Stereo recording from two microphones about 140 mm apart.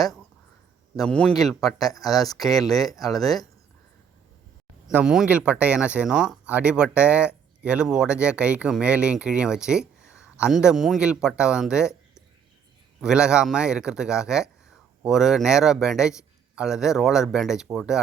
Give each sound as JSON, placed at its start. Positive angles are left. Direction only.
{"t": 0.9, "sound": "a man's voice", "side_deg": 5}
{"t": 2.5, "sound": "speech", "side_deg": 25}
{"t": 3.0, "sound": "a man's voice", "side_deg": 0}
{"t": 4.9, "sound": "a man's voice", "side_deg": -10}